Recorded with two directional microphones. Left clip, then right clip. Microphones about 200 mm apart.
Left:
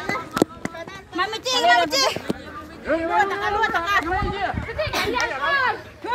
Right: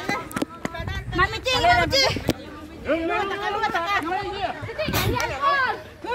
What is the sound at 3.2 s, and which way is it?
Speech, 55° left (ahead or behind).